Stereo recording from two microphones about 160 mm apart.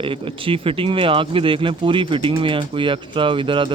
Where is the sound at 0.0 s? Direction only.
35° right (ahead or behind).